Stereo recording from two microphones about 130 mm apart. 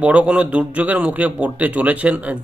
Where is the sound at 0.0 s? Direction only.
10° right (ahead or behind).